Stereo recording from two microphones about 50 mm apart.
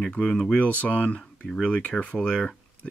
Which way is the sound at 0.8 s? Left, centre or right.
Left.